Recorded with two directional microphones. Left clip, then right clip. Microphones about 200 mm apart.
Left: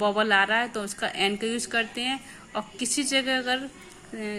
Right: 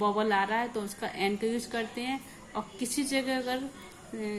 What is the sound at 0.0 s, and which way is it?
Speech, 20° left (ahead or behind).